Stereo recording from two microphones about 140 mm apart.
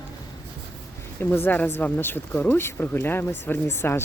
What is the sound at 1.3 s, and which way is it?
Speech, 15° left (ahead or behind).